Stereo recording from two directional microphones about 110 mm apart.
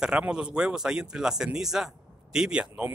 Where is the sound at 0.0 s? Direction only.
5° right (ahead or behind).